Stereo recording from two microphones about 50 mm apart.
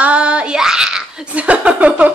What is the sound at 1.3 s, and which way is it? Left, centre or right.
Speech, right.